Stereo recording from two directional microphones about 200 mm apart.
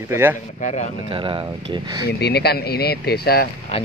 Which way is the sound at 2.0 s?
55° left (ahead or behind).